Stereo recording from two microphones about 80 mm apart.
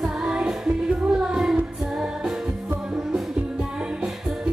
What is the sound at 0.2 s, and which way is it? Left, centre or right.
Music, centre.